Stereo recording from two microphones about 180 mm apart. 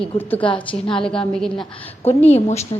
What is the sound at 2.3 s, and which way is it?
Speech, 35° left (ahead or behind).